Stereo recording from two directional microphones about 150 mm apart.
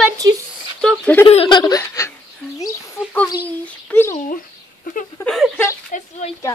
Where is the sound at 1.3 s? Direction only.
40° left (ahead or behind).